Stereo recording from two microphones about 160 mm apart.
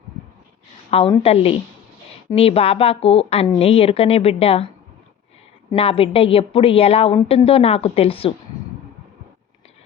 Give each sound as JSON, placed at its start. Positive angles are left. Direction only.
{"t": 0.9, "sound": "a woman's voice", "side_deg": 35}
{"t": 5.7, "sound": "a woman's voice", "side_deg": 35}